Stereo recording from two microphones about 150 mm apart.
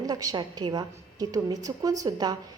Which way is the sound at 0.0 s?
25° right (ahead or behind).